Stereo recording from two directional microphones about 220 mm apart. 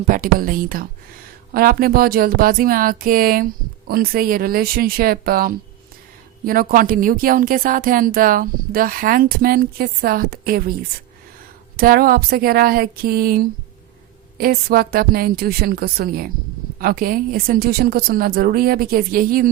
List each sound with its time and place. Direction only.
0.1 s a woman's voice: 40° right (ahead or behind)
11.8 s speech: 45° right (ahead or behind)